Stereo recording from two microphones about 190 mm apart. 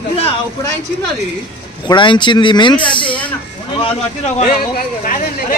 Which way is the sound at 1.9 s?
25° left (ahead or behind).